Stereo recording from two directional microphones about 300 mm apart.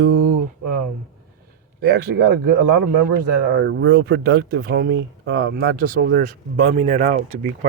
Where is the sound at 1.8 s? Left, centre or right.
Right.